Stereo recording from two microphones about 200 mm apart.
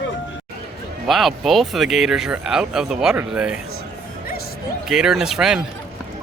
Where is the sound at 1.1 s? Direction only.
Centre (ahead or behind).